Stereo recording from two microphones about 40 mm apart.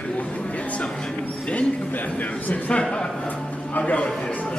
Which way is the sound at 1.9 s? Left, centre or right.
Left.